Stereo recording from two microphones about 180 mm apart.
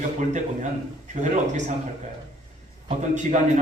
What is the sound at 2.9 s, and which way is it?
Speech, 40° right (ahead or behind).